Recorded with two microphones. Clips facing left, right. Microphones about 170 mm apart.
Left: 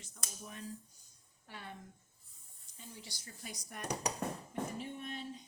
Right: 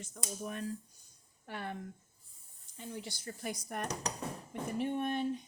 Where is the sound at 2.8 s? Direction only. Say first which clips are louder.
Right 9 dB; 60° right (ahead or behind).